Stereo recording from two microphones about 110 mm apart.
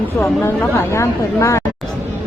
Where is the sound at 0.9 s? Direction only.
25° left (ahead or behind).